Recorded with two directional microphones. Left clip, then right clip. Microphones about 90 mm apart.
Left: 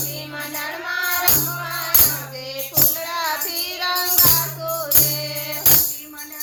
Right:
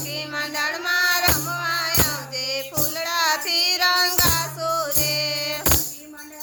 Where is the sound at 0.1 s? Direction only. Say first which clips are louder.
Right 3 dB; 20° right (ahead or behind).